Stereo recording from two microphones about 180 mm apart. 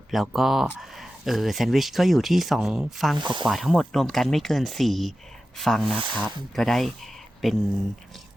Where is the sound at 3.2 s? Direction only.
25° right (ahead or behind).